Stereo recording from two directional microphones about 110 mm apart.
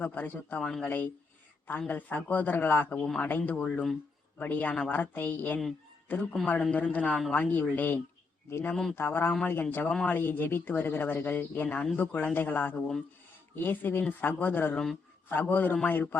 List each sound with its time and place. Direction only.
0.0 s speech: 15° left (ahead or behind)
7.3 s speech: 15° left (ahead or behind)
8.7 s speech: 5° left (ahead or behind)
9.0 s speech: 20° left (ahead or behind)